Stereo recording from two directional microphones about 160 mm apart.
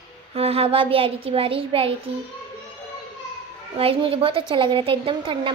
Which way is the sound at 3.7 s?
35° right (ahead or behind).